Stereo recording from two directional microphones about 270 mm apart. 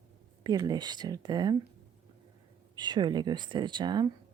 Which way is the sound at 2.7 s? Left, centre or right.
Centre.